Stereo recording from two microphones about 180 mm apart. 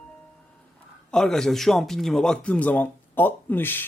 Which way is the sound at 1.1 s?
5° left (ahead or behind).